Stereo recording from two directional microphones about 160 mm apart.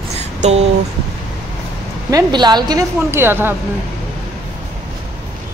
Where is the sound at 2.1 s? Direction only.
25° right (ahead or behind).